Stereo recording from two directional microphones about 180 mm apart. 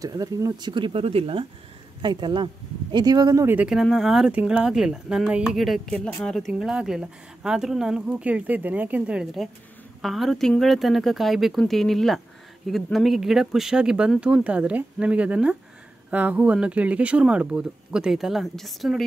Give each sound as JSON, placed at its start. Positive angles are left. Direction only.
{"t": 0.0, "sound": "speech", "side_deg": -20}